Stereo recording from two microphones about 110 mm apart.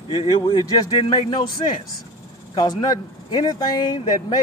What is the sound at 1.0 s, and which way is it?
Speech, 50° left (ahead or behind).